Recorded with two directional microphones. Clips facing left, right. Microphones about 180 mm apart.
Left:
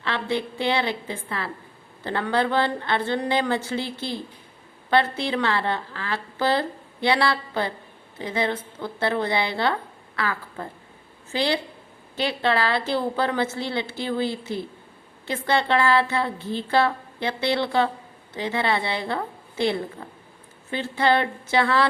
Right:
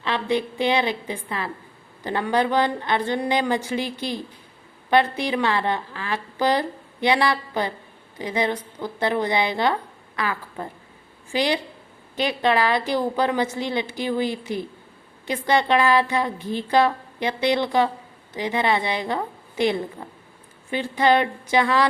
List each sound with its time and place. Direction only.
0.0 s a woman's voice: 15° right (ahead or behind)